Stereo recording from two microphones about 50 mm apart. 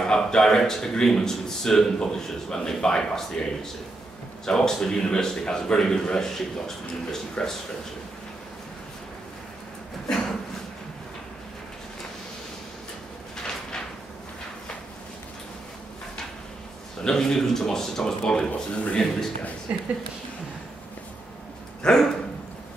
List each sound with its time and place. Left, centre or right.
0.0 s speech: centre
4.5 s speech: centre
10.0 s a sound: centre
17.0 s speech: centre
19.7 s speech: right
21.8 s speech: centre